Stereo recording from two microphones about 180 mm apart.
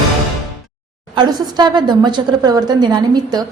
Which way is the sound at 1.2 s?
25° right (ahead or behind).